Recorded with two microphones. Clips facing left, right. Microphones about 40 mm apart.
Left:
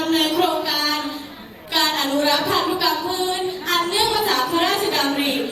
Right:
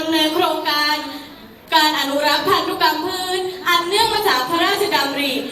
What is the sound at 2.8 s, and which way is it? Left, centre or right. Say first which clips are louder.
Music: right 4 dB; centre.